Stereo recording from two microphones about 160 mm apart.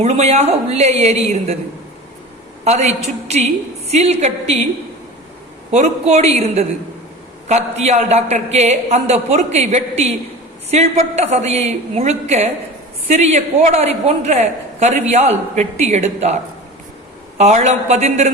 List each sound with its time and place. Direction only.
0.0 s a woman's voice: 40° right (ahead or behind)
2.6 s a woman's voice: 45° right (ahead or behind)
5.7 s a man's voice: 40° right (ahead or behind)